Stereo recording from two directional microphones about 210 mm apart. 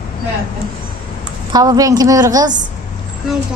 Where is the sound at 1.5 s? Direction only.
15° right (ahead or behind).